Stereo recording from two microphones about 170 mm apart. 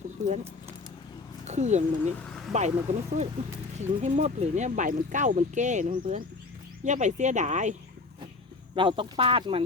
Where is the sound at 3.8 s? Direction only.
45° right (ahead or behind).